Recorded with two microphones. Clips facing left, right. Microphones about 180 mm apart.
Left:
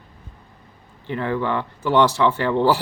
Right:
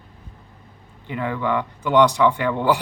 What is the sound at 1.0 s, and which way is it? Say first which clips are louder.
Speech: left 1 dB; 15° right (ahead or behind).